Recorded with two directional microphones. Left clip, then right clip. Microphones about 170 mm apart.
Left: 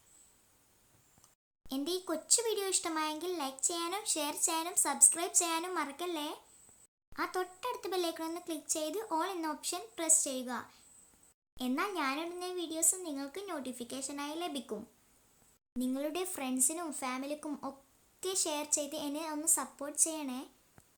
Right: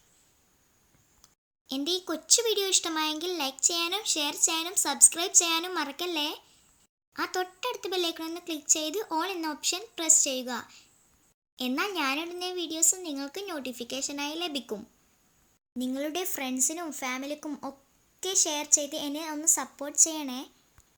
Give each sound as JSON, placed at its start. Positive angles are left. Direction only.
{"t": 1.7, "sound": "a woman's voice", "side_deg": -10}
{"t": 15.8, "sound": "a woman's voice", "side_deg": -15}